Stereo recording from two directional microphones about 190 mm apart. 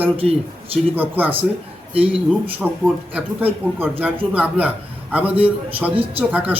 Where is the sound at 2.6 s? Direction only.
10° right (ahead or behind).